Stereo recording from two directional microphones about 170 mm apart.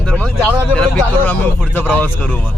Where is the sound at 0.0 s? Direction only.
5° left (ahead or behind).